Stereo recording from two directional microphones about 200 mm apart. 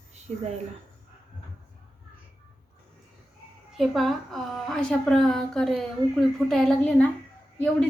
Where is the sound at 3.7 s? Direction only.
Centre (ahead or behind).